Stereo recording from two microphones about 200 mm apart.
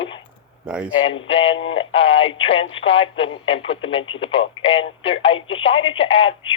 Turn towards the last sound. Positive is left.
turn(degrees=30)  # may be behind; listen again after turning